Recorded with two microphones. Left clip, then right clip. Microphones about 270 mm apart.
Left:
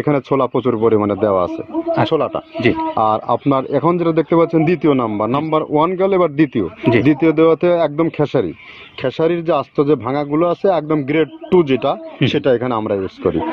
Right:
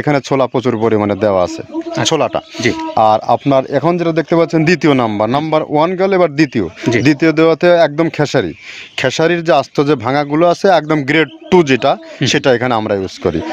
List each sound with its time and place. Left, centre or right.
0.0 s speech: right
2.6 s speech: centre
3.0 s speech: right